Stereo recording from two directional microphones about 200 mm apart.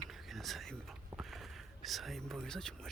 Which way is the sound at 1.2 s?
Centre (ahead or behind).